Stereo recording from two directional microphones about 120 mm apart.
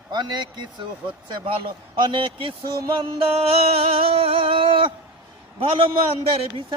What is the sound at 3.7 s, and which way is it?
A man's voice, 55° right (ahead or behind).